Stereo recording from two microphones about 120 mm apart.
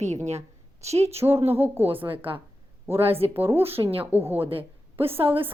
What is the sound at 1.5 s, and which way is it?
Speech, 20° right (ahead or behind).